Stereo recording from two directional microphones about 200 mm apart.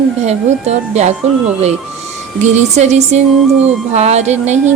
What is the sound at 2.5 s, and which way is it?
A woman's voice, 35° right (ahead or behind).